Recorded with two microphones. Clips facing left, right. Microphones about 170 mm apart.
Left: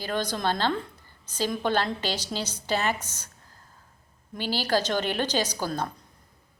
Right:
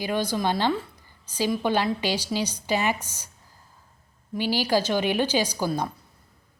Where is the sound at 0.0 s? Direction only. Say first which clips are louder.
Right 3 dB; 10° right (ahead or behind).